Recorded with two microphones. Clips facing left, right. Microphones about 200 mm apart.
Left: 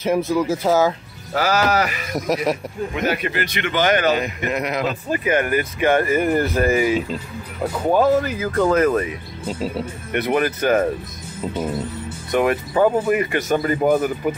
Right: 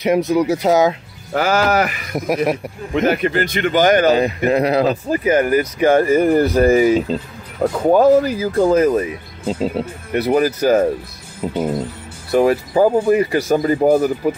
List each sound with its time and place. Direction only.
0.0 s speech: 15° right (ahead or behind)
1.3 s speech: 50° right (ahead or behind)
8.5 s speech: 25° right (ahead or behind)
11.4 s speech: 15° right (ahead or behind)
12.3 s speech: 30° right (ahead or behind)